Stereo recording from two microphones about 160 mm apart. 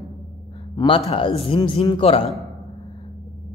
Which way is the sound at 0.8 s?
25° left (ahead or behind).